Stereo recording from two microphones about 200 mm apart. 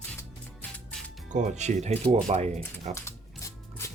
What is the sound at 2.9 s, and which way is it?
Music, 15° left (ahead or behind).